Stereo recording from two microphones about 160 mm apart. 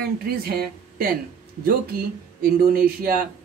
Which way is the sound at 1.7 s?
70° right (ahead or behind).